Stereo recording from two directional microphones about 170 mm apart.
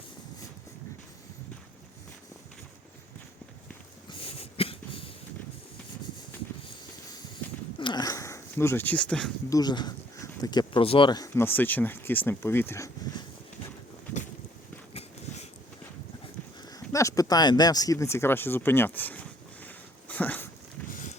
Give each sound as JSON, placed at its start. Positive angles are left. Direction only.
{"t": 4.2, "sound": "cough", "side_deg": 35}
{"t": 7.8, "sound": "speech", "side_deg": 25}
{"t": 9.5, "sound": "speech", "side_deg": 25}
{"t": 16.7, "sound": "speech", "side_deg": 20}
{"t": 20.9, "sound": "a sound", "side_deg": 50}